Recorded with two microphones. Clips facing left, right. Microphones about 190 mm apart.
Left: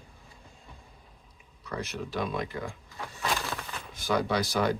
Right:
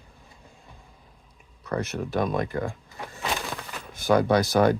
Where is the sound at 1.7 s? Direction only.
50° right (ahead or behind).